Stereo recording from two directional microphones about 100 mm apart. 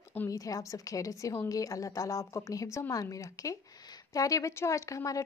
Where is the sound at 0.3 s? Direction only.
35° left (ahead or behind).